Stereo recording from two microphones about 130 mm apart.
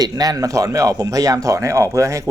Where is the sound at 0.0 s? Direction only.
30° right (ahead or behind).